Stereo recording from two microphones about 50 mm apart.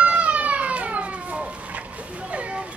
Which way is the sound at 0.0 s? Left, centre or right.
Right.